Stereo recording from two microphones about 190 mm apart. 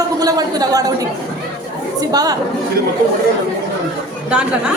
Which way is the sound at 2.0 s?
20° right (ahead or behind).